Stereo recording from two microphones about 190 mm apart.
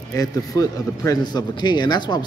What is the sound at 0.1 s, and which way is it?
A man's voice, 20° left (ahead or behind).